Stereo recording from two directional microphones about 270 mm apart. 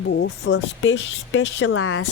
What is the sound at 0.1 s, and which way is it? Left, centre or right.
Speech, left.